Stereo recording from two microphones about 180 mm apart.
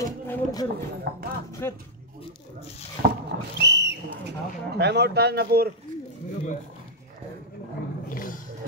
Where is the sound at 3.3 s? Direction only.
70° right (ahead or behind).